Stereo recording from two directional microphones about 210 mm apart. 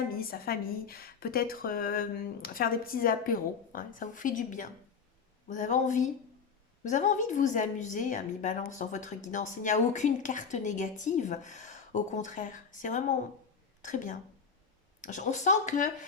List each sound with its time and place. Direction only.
0.2 s a woman's voice: 45° left (ahead or behind)